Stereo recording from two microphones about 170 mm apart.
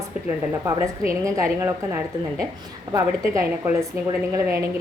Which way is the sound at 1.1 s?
20° right (ahead or behind).